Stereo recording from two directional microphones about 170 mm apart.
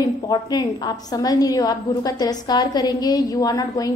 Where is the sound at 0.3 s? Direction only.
25° left (ahead or behind).